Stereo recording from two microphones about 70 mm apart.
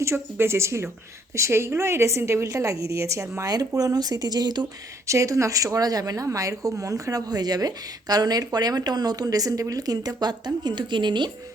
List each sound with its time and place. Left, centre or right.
0.0 s a woman's voice: right
3.8 s a woman's voice: right
5.0 s speech: right
6.2 s a woman's voice: right